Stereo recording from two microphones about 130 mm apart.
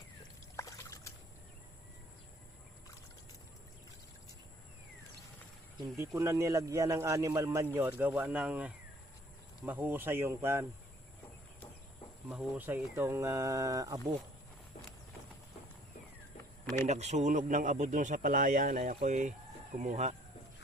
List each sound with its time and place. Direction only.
0.5 s a sound: 25° left (ahead or behind)
6.1 s a man's voice: 25° right (ahead or behind)
12.3 s a man's voice: 10° right (ahead or behind); by 14.2 s 25° right (ahead or behind)
16.8 s speech: 60° right (ahead or behind); by 18.9 s 90° right
19.0 s speech: 65° right (ahead or behind)